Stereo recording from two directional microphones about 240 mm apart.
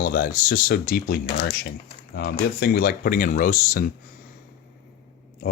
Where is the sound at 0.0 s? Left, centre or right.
Left.